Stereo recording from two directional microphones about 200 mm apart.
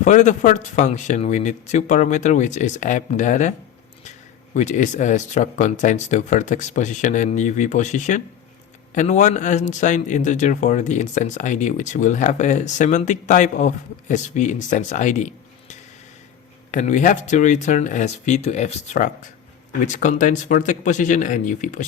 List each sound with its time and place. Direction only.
0.0 s speech: 35° left (ahead or behind)
4.5 s speech: 35° left (ahead or behind)
16.7 s speech: 40° left (ahead or behind)